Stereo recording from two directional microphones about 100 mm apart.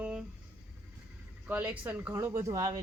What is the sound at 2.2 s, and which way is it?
Speech, 30° right (ahead or behind).